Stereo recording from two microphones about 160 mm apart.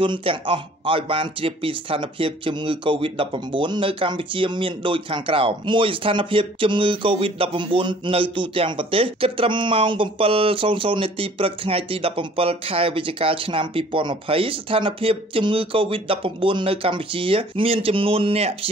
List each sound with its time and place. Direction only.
0.0 s speech: 35° right (ahead or behind)